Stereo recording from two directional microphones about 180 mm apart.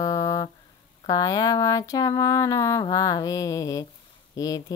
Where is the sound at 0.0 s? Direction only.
20° left (ahead or behind).